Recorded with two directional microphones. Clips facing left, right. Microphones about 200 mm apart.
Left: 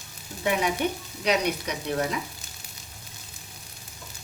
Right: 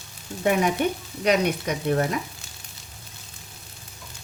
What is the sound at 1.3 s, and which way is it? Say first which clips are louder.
Frying: right 4 dB; 50° right (ahead or behind).